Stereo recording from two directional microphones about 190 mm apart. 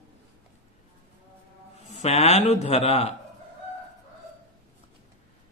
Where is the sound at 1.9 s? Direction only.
35° left (ahead or behind).